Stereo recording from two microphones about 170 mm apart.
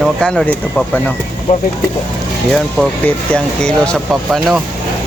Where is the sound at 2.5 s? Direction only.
5° left (ahead or behind).